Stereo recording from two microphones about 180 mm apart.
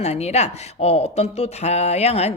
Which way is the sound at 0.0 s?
35° left (ahead or behind).